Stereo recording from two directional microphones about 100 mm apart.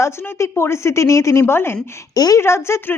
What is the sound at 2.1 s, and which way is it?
Speech, 40° left (ahead or behind).